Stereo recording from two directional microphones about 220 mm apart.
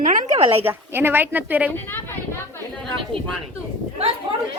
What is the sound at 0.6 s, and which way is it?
A woman's voice, 10° right (ahead or behind).